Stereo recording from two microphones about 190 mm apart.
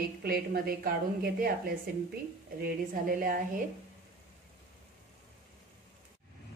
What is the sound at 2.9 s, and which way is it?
Speech, 45° right (ahead or behind).